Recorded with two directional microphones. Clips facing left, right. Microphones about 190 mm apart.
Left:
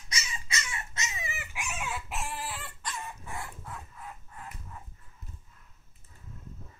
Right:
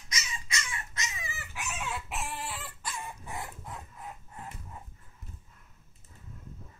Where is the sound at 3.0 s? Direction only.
15° right (ahead or behind).